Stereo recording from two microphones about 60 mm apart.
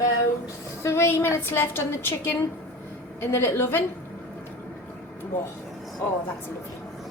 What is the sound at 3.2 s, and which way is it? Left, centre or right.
Speech, left.